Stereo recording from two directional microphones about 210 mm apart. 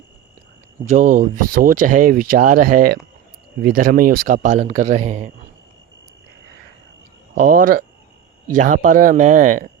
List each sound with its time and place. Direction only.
0.9 s speech: 40° right (ahead or behind)
7.3 s speech: 40° right (ahead or behind)